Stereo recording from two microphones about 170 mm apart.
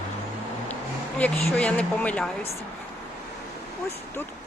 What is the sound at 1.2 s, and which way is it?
Speech, 5° left (ahead or behind).